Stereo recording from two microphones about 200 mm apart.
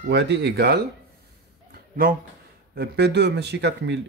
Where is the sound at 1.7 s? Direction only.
45° right (ahead or behind).